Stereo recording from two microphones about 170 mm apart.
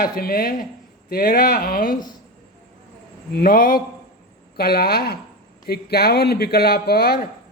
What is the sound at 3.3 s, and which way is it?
Speech, 60° left (ahead or behind).